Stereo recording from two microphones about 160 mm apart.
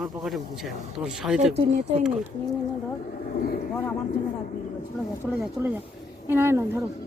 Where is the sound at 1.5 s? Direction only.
45° right (ahead or behind).